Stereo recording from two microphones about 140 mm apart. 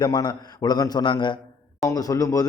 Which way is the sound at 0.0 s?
30° left (ahead or behind).